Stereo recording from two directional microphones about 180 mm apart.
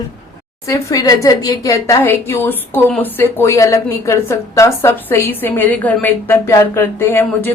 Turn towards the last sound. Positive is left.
turn(degrees=10)  # may be behind; listen again after turning